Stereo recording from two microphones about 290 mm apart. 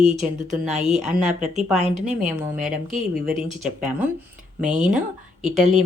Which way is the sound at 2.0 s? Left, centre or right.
Right.